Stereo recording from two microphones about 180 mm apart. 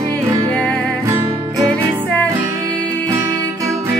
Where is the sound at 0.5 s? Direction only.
5° left (ahead or behind).